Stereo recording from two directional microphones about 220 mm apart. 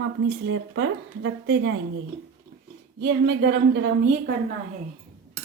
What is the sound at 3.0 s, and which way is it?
Speech, 50° right (ahead or behind).